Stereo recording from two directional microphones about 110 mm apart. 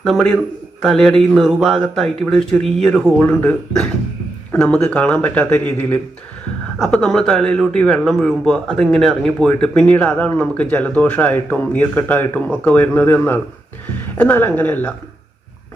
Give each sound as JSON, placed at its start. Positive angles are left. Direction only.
{"t": 0.0, "sound": "a man's voice", "side_deg": 5}
{"t": 3.2, "sound": "speech", "side_deg": 15}
{"t": 4.5, "sound": "speech", "side_deg": 10}
{"t": 6.7, "sound": "speech", "side_deg": 5}